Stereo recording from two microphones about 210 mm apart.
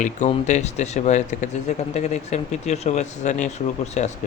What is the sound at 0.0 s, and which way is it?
Speech, 35° left (ahead or behind).